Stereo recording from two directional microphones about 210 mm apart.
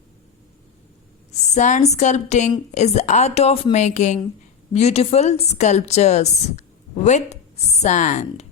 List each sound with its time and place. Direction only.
1.3 s a woman's voice: 35° left (ahead or behind)